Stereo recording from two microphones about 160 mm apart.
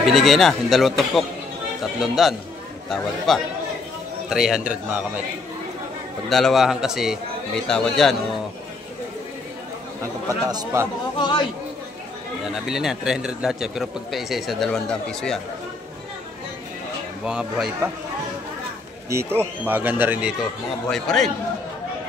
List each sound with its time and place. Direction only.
0.0 s a man's voice: centre (ahead or behind)
6.2 s a man's voice: centre (ahead or behind)
10.4 s speech: 25° right (ahead or behind)
11.1 s speech: 30° left (ahead or behind)
12.6 s a man's voice: centre (ahead or behind)
17.2 s a man's voice: 5° right (ahead or behind)
19.0 s a man's voice: 15° right (ahead or behind); by 21.3 s centre (ahead or behind)